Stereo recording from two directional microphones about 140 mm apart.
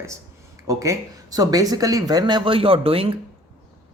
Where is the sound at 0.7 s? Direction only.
25° right (ahead or behind).